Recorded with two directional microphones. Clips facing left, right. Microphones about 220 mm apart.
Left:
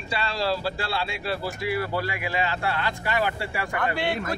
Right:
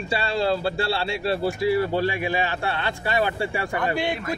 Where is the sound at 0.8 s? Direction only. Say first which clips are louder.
Right 5 dB; 30° right (ahead or behind).